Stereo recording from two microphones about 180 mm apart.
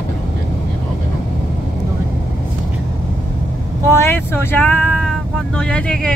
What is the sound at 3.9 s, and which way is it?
Speech, 15° left (ahead or behind).